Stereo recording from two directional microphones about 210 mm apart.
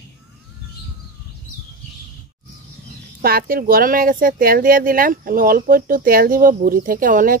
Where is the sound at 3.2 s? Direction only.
45° right (ahead or behind).